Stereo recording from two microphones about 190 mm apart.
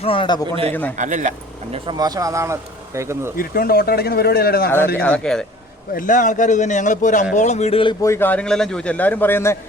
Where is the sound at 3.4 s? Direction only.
50° left (ahead or behind).